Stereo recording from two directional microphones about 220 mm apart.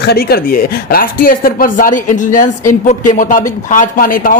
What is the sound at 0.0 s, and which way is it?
Speech, 45° left (ahead or behind).